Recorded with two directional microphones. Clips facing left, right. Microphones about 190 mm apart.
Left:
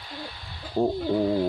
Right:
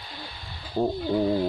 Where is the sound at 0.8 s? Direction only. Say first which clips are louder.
Left 1 dB; 10° left (ahead or behind).